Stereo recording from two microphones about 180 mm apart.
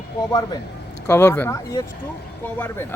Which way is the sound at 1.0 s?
15° left (ahead or behind).